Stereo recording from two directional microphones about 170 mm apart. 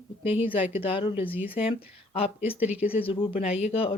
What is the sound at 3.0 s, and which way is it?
Speech, 30° left (ahead or behind).